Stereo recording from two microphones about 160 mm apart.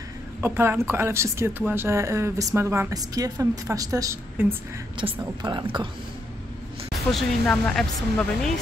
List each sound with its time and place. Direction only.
0.4 s a woman's voice: 15° right (ahead or behind)
5.0 s a woman's voice: 30° right (ahead or behind)
7.1 s speech: 5° left (ahead or behind)